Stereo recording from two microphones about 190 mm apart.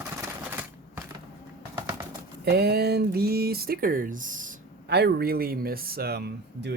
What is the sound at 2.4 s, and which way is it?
Speech, 60° right (ahead or behind).